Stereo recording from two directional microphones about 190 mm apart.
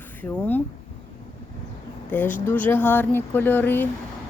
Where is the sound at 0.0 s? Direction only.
10° left (ahead or behind).